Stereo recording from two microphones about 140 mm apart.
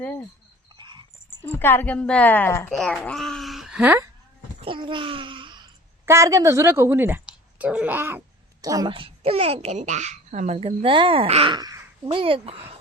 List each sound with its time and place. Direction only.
0.7 s a sound: 35° right (ahead or behind)
1.4 s a woman's voice: 15° left (ahead or behind)
2.6 s speech: centre (ahead or behind)
4.6 s babbling: 35° right (ahead or behind)
6.1 s speech: 20° right (ahead or behind)
8.9 s a child's voice: 40° right (ahead or behind)
11.5 s speech: 25° right (ahead or behind)
12.0 s speech: 40° right (ahead or behind)